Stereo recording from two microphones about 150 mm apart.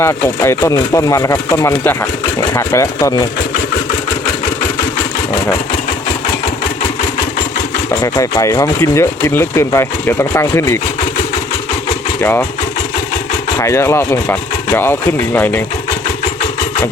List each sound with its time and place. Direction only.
0.0 s speech: 20° left (ahead or behind)
8.0 s speech: 25° left (ahead or behind)
12.2 s speech: 15° left (ahead or behind)
13.6 s speech: 20° left (ahead or behind)